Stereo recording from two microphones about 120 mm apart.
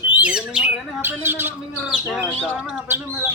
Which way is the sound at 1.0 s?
15° right (ahead or behind).